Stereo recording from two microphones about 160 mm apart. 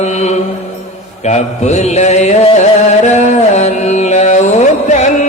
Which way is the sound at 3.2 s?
45° left (ahead or behind).